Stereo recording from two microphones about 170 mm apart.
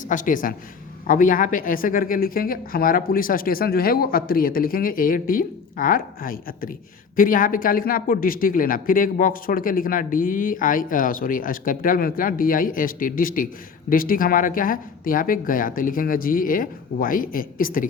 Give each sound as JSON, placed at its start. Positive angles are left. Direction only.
{"t": 0.1, "sound": "speech", "side_deg": 50}